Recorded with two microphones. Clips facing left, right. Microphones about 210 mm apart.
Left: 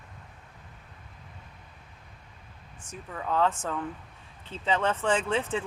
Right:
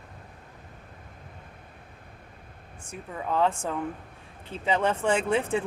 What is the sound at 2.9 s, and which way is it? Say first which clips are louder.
Speech: right 1 dB; 10° right (ahead or behind).